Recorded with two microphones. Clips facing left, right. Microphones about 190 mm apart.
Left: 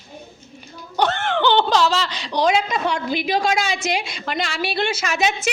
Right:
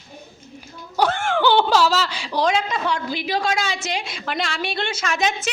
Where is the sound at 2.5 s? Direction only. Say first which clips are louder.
Left 2 dB; 15° left (ahead or behind).